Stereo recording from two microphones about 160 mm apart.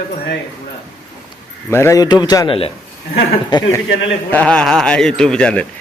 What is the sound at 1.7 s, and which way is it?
Speech, 15° left (ahead or behind).